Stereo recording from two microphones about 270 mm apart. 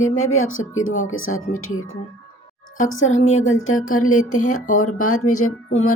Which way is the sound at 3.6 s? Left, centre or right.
Left.